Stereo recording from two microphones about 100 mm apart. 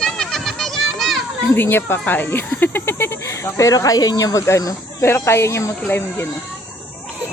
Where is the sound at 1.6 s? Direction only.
20° left (ahead or behind).